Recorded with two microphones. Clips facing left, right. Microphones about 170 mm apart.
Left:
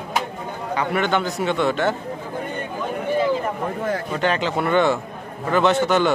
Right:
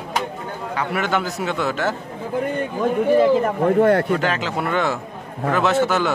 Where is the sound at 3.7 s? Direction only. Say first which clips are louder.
Right 10 dB; 65° right (ahead or behind).